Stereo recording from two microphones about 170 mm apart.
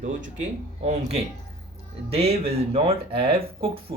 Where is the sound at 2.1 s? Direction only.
35° right (ahead or behind).